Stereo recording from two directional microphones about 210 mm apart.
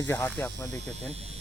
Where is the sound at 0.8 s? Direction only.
30° right (ahead or behind).